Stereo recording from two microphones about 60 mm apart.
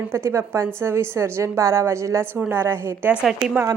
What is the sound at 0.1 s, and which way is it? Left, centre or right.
A woman's voice, right.